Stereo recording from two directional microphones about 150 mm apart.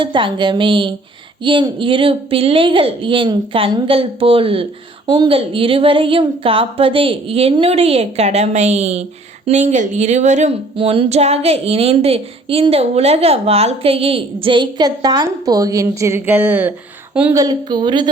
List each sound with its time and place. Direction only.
0.0 s a woman's voice: 30° right (ahead or behind)
5.0 s a woman's voice: 25° right (ahead or behind); by 10.6 s 50° right (ahead or behind)
10.8 s a woman's voice: 40° right (ahead or behind); by 16.7 s 10° right (ahead or behind)
17.3 s a woman's voice: 25° right (ahead or behind)